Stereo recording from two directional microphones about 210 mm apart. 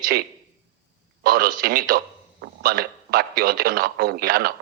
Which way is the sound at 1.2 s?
45° right (ahead or behind).